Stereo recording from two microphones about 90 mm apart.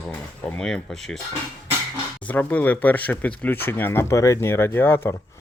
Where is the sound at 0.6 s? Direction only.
5° left (ahead or behind).